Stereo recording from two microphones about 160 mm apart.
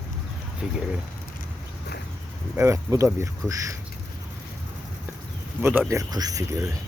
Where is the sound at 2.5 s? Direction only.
15° right (ahead or behind).